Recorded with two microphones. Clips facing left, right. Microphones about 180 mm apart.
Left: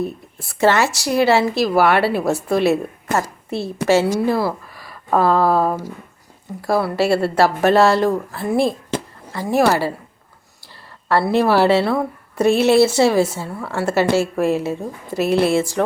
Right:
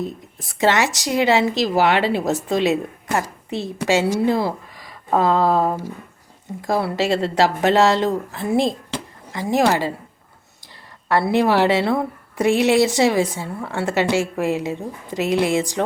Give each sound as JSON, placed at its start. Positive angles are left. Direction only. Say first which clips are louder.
{"t": 0.0, "sound": "a woman's voice", "louder": "left 3 dB", "side_deg": -15}
{"t": 11.1, "sound": "a woman's voice", "louder": "left 1 dB", "side_deg": -15}